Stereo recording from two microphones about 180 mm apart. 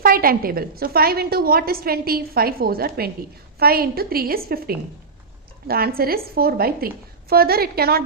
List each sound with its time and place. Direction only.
0.0 s a woman's voice: 55° right (ahead or behind)